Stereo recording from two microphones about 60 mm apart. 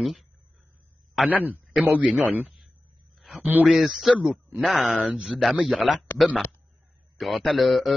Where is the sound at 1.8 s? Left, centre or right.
Centre.